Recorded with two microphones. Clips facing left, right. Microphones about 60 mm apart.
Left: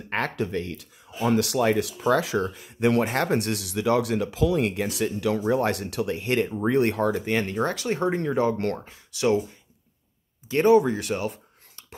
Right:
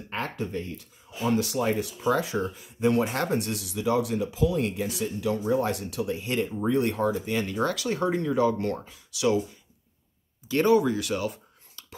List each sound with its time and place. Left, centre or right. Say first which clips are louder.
0.1 s speech: left 5 dB; left
3.0 s speech: left 2 dB; left
3.3 s speech: left 3 dB; left
7.5 s speech: left 1 dB; left
10.5 s speech: left 3 dB; left
10.9 s a sound: left 1 dB; left